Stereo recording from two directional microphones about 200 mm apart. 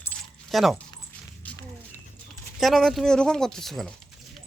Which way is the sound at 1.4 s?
10° left (ahead or behind).